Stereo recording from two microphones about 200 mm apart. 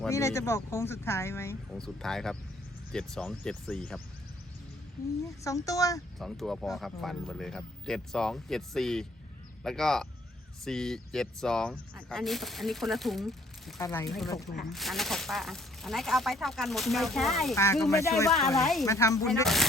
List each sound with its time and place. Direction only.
0.1 s speech: 15° left (ahead or behind)
1.7 s speech: centre (ahead or behind)
5.2 s speech: 15° left (ahead or behind)
6.1 s speech: centre (ahead or behind)
13.7 s speech: 15° left (ahead or behind)
14.2 s speech: centre (ahead or behind)
17.5 s speech: 15° left (ahead or behind)
18.3 s speech: centre (ahead or behind)
18.9 s speech: 15° left (ahead or behind)
19.3 s speech: centre (ahead or behind)